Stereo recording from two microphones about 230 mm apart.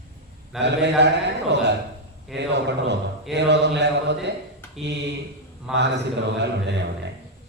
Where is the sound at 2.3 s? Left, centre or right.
Right.